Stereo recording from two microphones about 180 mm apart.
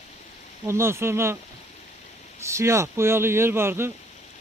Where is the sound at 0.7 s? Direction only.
15° right (ahead or behind).